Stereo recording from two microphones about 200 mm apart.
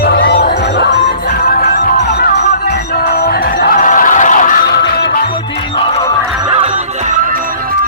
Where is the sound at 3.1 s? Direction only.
55° left (ahead or behind).